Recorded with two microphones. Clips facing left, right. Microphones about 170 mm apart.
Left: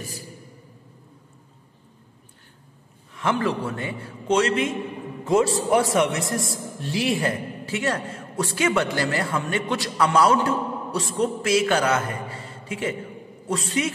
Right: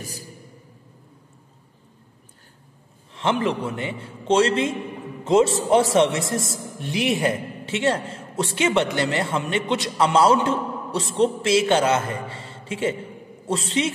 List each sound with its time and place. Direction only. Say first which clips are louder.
3.1 s a man's voice: right 1 dB; 25° right (ahead or behind)